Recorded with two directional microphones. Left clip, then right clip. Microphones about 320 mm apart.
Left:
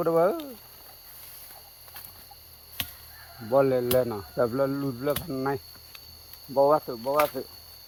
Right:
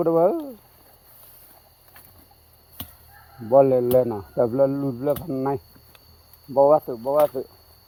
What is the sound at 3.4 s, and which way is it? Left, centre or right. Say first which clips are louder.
Speech: right 6 dB; right.